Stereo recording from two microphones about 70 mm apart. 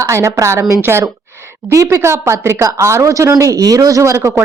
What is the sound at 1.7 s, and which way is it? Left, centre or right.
A woman's voice, right.